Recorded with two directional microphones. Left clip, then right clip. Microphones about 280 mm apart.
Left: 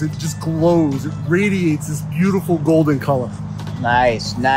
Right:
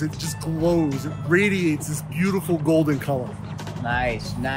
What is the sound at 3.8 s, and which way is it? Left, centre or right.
Speech, left.